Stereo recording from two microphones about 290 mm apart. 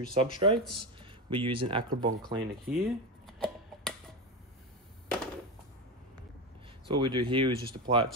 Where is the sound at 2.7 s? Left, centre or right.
Centre.